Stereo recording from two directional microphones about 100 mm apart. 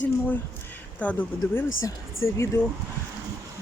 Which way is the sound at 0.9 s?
15° left (ahead or behind).